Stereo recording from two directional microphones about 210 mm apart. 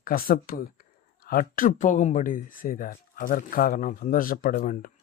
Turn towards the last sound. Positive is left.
turn(degrees=40)  # may be behind; listen again after turning